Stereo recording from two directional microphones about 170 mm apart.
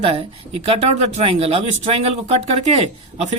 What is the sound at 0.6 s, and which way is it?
Speech, 35° right (ahead or behind).